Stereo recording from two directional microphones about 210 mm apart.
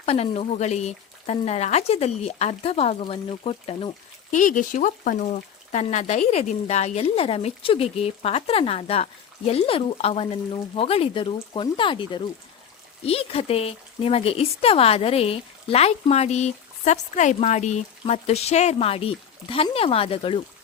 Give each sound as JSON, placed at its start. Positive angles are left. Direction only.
{"t": 0.0, "sound": "speech", "side_deg": 30}
{"t": 4.4, "sound": "speech", "side_deg": 40}